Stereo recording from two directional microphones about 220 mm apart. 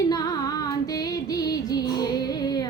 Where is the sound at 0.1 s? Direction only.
15° left (ahead or behind).